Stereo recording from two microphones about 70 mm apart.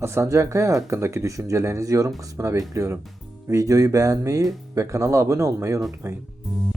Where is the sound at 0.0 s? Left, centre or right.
Right.